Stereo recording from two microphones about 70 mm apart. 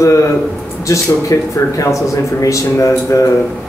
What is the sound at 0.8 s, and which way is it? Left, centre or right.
Speech, left.